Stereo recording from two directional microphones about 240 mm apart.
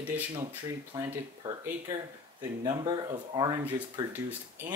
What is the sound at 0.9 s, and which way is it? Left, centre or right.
Speech, centre.